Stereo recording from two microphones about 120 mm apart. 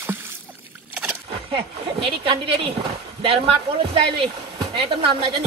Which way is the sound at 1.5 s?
45° right (ahead or behind).